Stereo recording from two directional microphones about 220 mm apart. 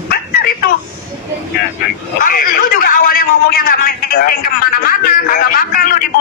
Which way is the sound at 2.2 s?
40° left (ahead or behind).